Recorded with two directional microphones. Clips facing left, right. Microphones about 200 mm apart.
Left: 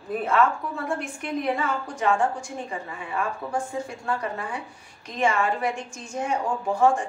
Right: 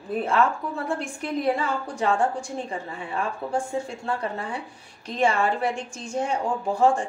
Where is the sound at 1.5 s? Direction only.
30° right (ahead or behind).